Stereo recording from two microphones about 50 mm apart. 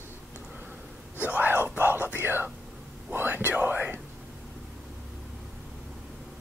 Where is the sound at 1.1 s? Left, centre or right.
Right.